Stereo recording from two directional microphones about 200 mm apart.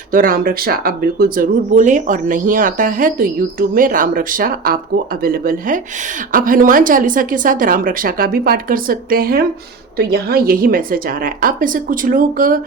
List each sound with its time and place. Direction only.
0.1 s speech: 45° right (ahead or behind)